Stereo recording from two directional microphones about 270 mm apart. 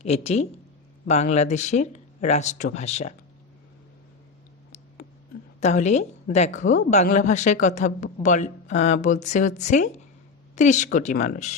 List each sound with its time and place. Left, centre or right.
0.0 s a woman's voice: left
5.5 s a woman's voice: left